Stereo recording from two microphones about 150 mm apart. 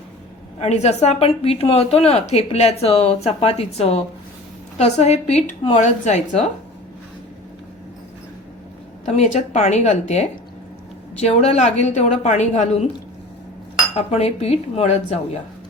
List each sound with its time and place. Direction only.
0.6 s a woman's voice: 45° left (ahead or behind)
9.0 s a woman's voice: 50° left (ahead or behind)
13.9 s a woman's voice: 45° left (ahead or behind)